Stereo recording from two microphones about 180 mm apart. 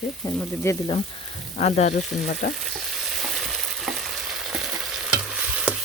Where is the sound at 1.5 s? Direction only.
40° left (ahead or behind).